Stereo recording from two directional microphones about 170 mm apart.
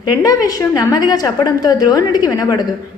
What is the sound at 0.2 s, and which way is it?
A woman's voice, 20° left (ahead or behind).